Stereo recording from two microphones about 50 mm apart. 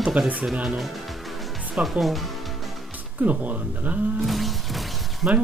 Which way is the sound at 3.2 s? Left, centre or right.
Right.